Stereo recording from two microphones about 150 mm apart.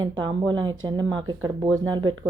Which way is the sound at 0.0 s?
30° right (ahead or behind).